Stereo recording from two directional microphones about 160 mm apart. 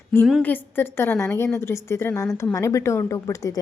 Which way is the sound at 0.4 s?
10° left (ahead or behind).